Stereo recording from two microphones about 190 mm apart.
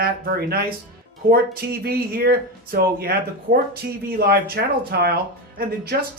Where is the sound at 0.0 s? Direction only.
55° right (ahead or behind).